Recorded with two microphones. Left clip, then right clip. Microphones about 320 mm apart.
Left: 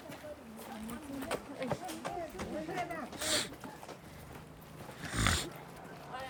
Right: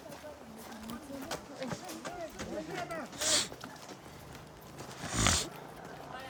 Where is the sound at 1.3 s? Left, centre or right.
Centre.